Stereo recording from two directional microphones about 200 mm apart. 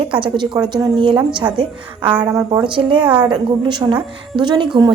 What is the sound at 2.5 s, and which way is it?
A woman's voice, 25° right (ahead or behind).